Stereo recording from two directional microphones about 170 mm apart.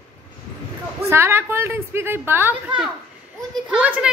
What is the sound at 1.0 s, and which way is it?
A woman's voice, 15° right (ahead or behind).